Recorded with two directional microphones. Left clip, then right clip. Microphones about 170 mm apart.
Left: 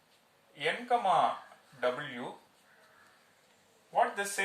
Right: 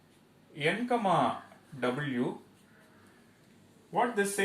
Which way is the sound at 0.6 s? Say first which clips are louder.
Right 1 dB; 15° left (ahead or behind).